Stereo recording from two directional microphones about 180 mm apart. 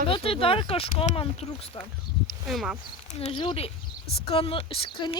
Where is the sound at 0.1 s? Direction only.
30° left (ahead or behind).